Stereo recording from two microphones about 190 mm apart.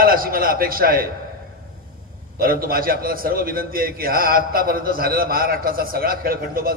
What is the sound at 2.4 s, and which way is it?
A man's voice, 50° right (ahead or behind).